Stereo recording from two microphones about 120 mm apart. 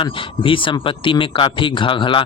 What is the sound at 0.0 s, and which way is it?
Speech, 45° left (ahead or behind).